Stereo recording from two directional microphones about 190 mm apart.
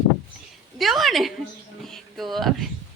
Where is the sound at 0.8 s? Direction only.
Centre (ahead or behind).